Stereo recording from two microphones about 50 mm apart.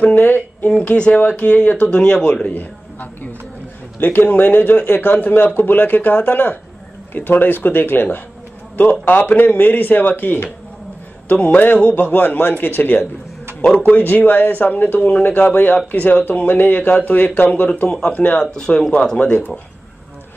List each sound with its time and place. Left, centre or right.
0.1 s speech: left
0.7 s speech: left
2.5 s music: left
4.0 s a man's voice: left
11.3 s speech: left
11.8 s a man's voice: left
18.4 s speech: centre